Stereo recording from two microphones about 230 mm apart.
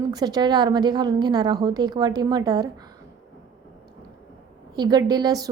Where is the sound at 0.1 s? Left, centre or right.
Centre.